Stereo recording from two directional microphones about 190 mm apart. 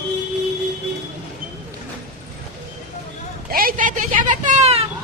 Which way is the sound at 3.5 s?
50° right (ahead or behind).